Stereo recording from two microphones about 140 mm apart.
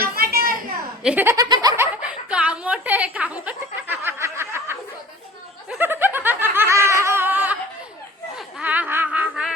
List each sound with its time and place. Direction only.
0.1 s children playing: 90° right
1.0 s speech: 15° right (ahead or behind)
1.4 s snicker: 25° right (ahead or behind)
2.0 s chuckle: 10° right (ahead or behind)
5.6 s snicker: 10° right (ahead or behind)
9.3 s a sound: 5° right (ahead or behind)